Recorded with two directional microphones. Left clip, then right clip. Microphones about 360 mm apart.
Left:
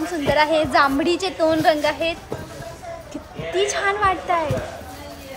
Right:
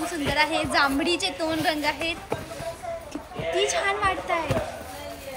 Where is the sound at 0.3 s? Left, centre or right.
Left.